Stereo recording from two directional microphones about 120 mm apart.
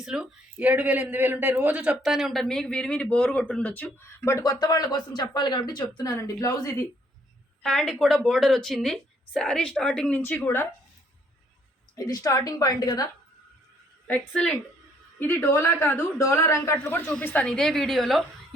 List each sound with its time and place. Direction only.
0.0 s a woman's voice: 5° right (ahead or behind)
0.5 s a man's voice: 15° right (ahead or behind); by 5.8 s 35° left (ahead or behind)
6.0 s a woman's voice: 25° left (ahead or behind)
7.6 s speech: 5° left (ahead or behind)
11.9 s a woman's voice: 30° left (ahead or behind)
14.1 s a woman's voice: 10° left (ahead or behind)